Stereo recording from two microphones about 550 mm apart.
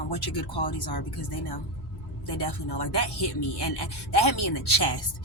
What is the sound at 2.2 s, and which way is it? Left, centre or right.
Speech, left.